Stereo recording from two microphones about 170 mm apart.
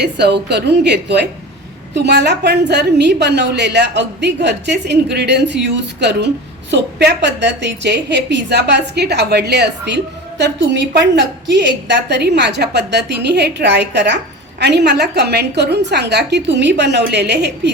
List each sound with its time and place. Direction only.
0.0 s a woman's voice: 80° right
14.6 s a woman's voice: 75° right (ahead or behind)